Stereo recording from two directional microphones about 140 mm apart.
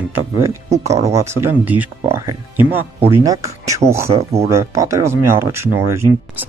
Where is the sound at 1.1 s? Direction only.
20° right (ahead or behind).